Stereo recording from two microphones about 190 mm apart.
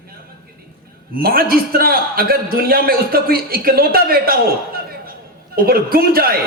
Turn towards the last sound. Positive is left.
turn(degrees=-50)  # may be behind; listen again after turning